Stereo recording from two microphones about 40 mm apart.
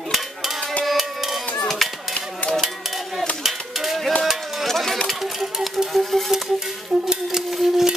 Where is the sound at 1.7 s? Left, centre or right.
Centre.